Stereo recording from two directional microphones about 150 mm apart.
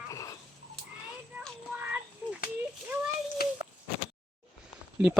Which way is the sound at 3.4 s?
90° left.